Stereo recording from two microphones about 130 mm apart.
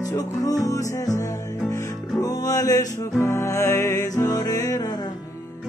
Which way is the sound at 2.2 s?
30° left (ahead or behind).